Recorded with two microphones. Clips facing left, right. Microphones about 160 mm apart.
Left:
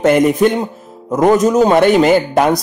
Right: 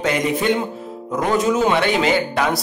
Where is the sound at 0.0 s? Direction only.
50° left (ahead or behind).